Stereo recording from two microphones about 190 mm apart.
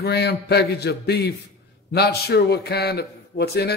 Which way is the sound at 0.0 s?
60° left (ahead or behind).